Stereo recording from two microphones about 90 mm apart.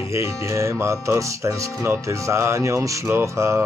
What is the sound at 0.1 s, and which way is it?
Speech, 30° right (ahead or behind).